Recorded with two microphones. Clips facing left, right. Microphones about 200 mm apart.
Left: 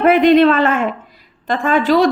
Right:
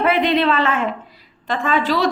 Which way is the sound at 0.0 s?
50° left (ahead or behind).